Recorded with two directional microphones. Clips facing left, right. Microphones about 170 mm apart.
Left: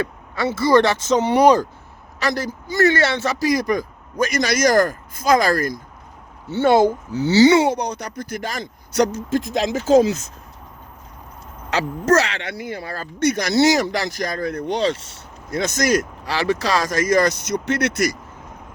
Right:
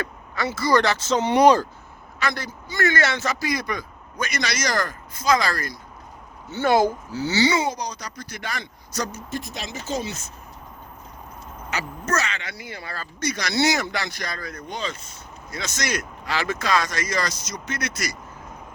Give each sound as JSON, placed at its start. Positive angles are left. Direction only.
{"t": 0.0, "sound": "speech", "side_deg": 25}
{"t": 2.1, "sound": "a man's voice", "side_deg": 40}
{"t": 6.5, "sound": "speech", "side_deg": 25}
{"t": 7.5, "sound": "speech", "side_deg": 65}
{"t": 9.0, "sound": "speech", "side_deg": 90}
{"t": 11.7, "sound": "speech", "side_deg": 90}
{"t": 13.1, "sound": "a man's voice", "side_deg": 55}
{"t": 15.4, "sound": "a man's voice", "side_deg": 55}